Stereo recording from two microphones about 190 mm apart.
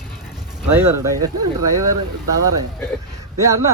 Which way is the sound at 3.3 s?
15° right (ahead or behind).